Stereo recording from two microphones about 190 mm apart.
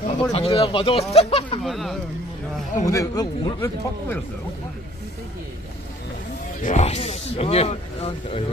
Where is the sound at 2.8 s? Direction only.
20° left (ahead or behind).